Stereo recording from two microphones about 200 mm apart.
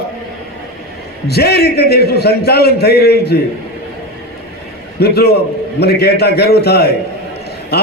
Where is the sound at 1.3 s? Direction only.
55° left (ahead or behind).